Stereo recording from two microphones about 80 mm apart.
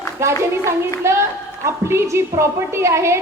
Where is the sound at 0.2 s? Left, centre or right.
Right.